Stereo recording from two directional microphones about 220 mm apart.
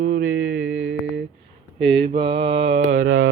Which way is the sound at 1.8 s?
25° right (ahead or behind).